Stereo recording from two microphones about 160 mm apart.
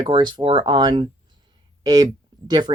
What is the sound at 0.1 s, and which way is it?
Speech, 25° right (ahead or behind).